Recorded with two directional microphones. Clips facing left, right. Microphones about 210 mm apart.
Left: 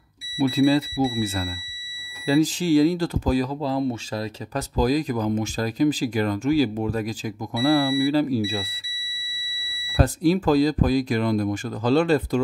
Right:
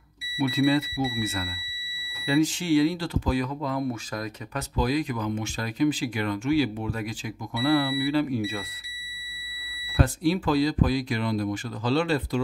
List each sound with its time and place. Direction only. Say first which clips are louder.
0.4 s speech: left 4 dB; 35° left (ahead or behind)
9.9 s speech: left 4 dB; 40° left (ahead or behind)